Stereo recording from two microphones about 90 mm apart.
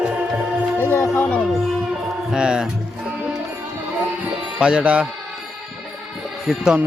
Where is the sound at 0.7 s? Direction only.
25° left (ahead or behind).